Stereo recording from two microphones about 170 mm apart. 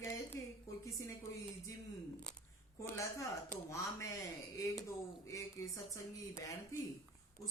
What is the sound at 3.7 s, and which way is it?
Speech, 20° left (ahead or behind).